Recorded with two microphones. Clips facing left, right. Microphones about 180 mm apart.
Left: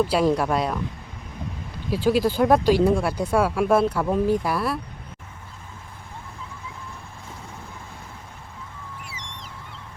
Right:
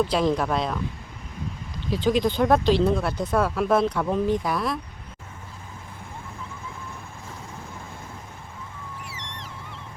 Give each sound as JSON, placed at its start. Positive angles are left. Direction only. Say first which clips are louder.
{"t": 0.0, "sound": "speech", "louder": "left 2 dB", "side_deg": 10}
{"t": 1.9, "sound": "speech", "louder": "left 1 dB", "side_deg": 5}